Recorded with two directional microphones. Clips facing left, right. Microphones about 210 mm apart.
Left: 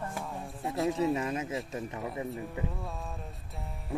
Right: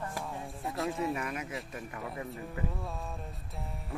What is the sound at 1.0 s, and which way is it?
A man's voice, 25° left (ahead or behind).